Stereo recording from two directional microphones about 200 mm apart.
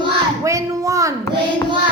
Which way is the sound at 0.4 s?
15° right (ahead or behind).